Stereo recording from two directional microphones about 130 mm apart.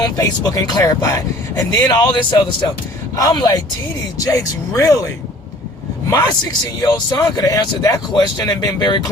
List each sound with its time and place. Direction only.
0.0 s speech: 30° left (ahead or behind)